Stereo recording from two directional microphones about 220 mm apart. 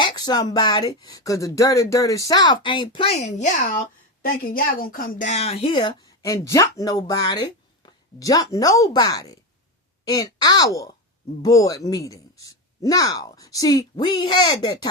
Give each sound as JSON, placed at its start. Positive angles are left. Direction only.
{"t": 0.0, "sound": "a woman's voice", "side_deg": 20}